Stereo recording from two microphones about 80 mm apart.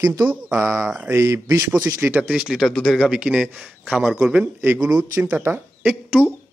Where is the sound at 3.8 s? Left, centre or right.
Centre.